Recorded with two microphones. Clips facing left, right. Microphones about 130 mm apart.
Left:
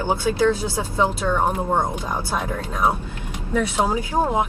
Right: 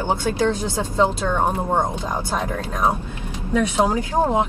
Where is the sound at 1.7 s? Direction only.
20° right (ahead or behind).